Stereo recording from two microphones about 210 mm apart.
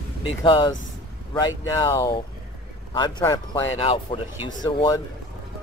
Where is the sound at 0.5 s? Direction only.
20° left (ahead or behind).